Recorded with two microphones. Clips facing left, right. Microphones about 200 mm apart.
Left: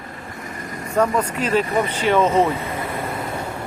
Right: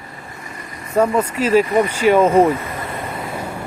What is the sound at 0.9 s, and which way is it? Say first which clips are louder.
Speech: right 3 dB; 5° right (ahead or behind).